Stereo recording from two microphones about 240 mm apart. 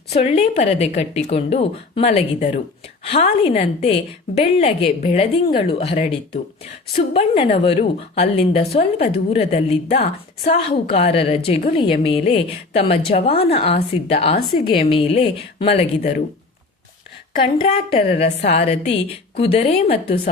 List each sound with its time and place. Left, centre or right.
0.1 s a woman's voice: left
17.3 s a woman's voice: left